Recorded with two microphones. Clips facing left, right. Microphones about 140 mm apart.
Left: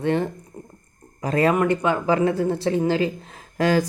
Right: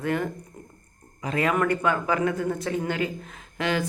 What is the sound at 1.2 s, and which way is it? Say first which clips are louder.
Speech: left 6 dB; 40° left (ahead or behind).